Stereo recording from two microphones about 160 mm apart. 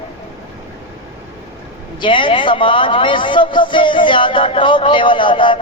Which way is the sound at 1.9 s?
30° left (ahead or behind).